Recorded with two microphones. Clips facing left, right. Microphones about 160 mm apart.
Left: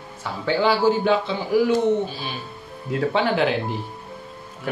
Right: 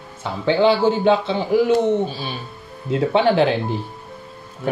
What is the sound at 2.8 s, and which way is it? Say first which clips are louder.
Speech: right 5 dB; 25° right (ahead or behind).